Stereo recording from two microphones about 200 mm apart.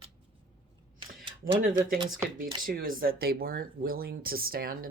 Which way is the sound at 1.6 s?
45° right (ahead or behind).